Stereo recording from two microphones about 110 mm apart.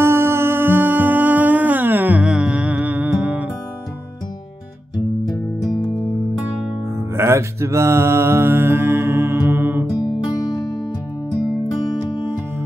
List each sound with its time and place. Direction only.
0.0 s music: 20° right (ahead or behind)
7.2 s mantra: 25° right (ahead or behind)